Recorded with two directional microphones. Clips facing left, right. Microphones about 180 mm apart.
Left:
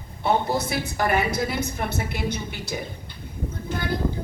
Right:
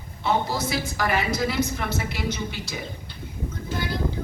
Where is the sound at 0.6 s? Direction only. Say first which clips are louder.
Left 1 dB; 55° left (ahead or behind).